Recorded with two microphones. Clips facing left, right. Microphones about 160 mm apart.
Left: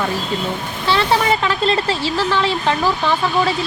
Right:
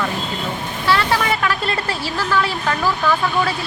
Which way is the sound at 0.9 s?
20° left (ahead or behind).